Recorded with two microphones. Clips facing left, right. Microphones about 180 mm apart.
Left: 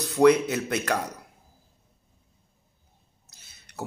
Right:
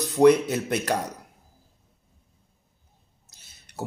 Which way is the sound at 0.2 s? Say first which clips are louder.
Right 1 dB; 40° right (ahead or behind).